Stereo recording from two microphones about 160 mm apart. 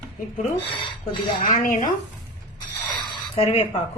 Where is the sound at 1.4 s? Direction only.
50° left (ahead or behind).